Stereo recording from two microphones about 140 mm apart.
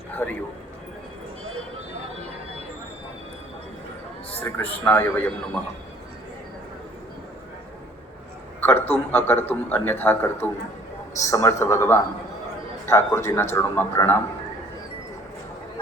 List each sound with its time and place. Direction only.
0.2 s a man's voice: 15° left (ahead or behind)
4.4 s a man's voice: 15° left (ahead or behind)
8.6 s a man's voice: 15° left (ahead or behind)